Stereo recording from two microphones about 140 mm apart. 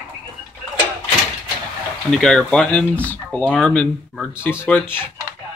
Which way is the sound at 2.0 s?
5° left (ahead or behind).